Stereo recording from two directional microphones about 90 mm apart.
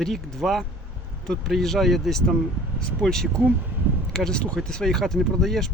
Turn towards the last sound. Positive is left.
turn(degrees=5)  # may be behind; listen again after turning